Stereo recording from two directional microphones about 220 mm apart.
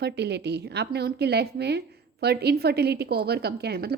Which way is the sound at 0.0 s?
50° right (ahead or behind).